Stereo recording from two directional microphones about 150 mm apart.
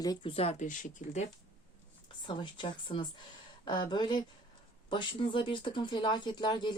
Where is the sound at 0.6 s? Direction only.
55° left (ahead or behind).